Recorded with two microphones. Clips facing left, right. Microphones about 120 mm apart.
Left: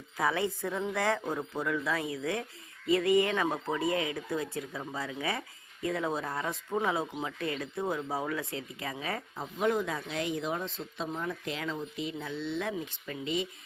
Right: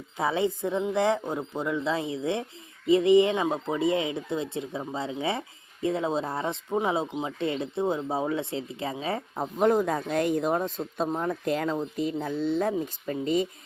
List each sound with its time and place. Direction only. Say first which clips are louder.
0.2 s a woman's voice: right 4 dB; 25° right (ahead or behind)
9.3 s speech: right 7 dB; 50° right (ahead or behind)